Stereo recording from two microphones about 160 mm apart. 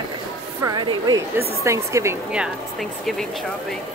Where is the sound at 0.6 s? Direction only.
25° right (ahead or behind).